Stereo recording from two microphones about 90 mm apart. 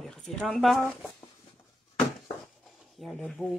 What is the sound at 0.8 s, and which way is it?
Speech, 20° left (ahead or behind).